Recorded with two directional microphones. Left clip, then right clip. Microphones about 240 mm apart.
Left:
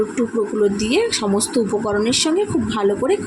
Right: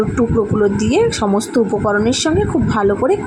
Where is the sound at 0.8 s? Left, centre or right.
Centre.